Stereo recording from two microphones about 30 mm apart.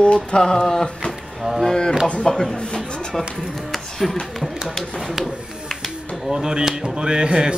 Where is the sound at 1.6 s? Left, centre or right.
Left.